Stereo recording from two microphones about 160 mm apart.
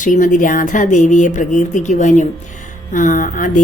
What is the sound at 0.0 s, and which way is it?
Speech, 55° left (ahead or behind).